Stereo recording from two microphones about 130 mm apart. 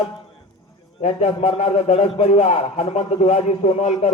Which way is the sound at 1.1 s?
45° left (ahead or behind).